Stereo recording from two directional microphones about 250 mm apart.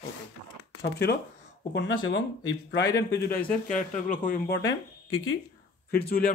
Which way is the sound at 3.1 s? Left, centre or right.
Left.